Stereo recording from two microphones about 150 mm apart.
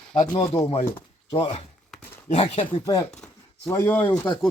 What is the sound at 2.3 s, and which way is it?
Speech, 45° left (ahead or behind).